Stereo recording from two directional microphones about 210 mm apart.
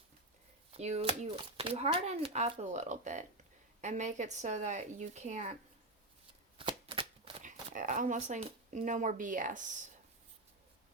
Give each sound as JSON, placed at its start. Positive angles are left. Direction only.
{"t": 0.7, "sound": "speech", "side_deg": -30}
{"t": 6.6, "sound": "shuffling cards", "side_deg": -25}
{"t": 7.4, "sound": "speech", "side_deg": -40}